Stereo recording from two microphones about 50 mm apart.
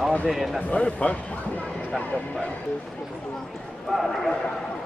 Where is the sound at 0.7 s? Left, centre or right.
Left.